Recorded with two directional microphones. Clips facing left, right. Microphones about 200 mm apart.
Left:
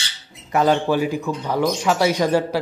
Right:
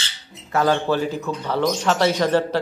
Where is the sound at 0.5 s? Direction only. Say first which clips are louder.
Left 2 dB; 15° left (ahead or behind).